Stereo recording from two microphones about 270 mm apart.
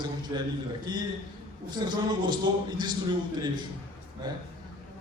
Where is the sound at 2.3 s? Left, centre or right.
Centre.